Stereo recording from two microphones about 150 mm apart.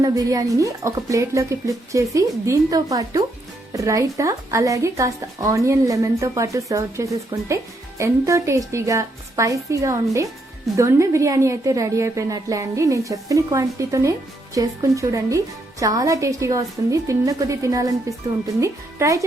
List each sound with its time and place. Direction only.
0.0 s a woman's voice: 25° right (ahead or behind)